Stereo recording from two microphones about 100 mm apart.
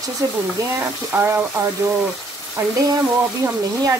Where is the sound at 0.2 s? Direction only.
35° right (ahead or behind).